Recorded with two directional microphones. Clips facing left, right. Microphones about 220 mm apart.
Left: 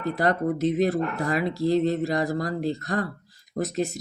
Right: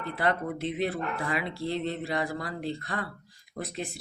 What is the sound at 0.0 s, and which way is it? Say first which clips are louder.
Speech: left 5 dB; 40° left (ahead or behind).